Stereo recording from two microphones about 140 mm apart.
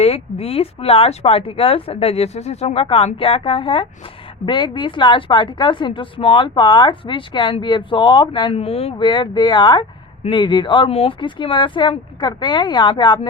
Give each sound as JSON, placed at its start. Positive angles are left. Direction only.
{"t": 0.0, "sound": "speech", "side_deg": 45}